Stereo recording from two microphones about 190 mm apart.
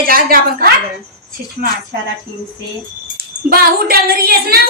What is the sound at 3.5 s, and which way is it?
A woman's voice, 50° right (ahead or behind).